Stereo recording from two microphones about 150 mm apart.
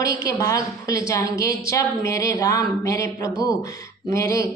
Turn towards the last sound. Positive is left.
turn(degrees=20)  # may be behind; listen again after turning